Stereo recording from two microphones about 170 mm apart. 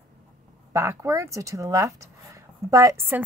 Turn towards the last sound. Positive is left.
turn(degrees=-15)  # may be behind; listen again after turning